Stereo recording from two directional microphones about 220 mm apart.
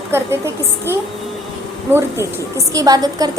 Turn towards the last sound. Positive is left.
turn(degrees=-15)  # may be behind; listen again after turning